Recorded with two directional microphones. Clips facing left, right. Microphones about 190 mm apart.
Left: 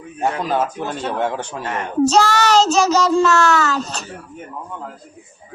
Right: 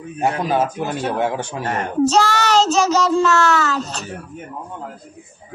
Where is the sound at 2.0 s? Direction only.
40° left (ahead or behind).